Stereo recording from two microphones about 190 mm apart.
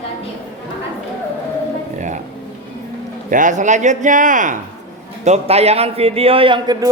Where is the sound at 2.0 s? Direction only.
40° right (ahead or behind).